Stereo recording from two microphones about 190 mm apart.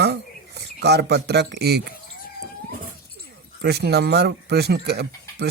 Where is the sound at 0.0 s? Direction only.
60° right (ahead or behind).